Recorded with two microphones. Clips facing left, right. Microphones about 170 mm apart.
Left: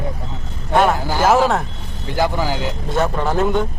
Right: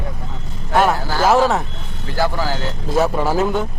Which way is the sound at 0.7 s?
Centre (ahead or behind).